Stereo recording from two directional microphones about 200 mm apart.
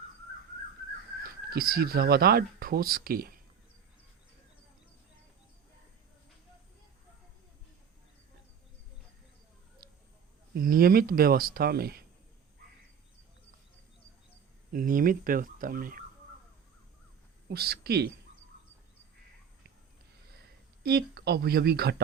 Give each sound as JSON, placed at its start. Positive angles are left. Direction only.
{"t": 1.2, "sound": "speech", "side_deg": -50}
{"t": 10.5, "sound": "speech", "side_deg": -45}
{"t": 14.7, "sound": "speech", "side_deg": -45}
{"t": 17.5, "sound": "speech", "side_deg": -50}
{"t": 20.8, "sound": "speech", "side_deg": -50}